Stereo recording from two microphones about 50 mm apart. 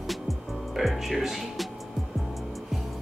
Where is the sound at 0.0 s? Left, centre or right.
Centre.